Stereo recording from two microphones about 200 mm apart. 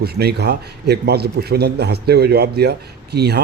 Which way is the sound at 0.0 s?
55° right (ahead or behind).